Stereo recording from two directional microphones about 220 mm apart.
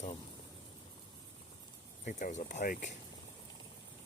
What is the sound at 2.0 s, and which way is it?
Speech, 35° left (ahead or behind).